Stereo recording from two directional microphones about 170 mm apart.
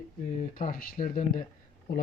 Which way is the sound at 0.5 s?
55° left (ahead or behind).